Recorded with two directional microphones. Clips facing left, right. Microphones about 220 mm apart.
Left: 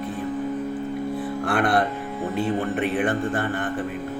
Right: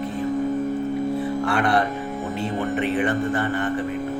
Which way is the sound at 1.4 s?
55° left (ahead or behind).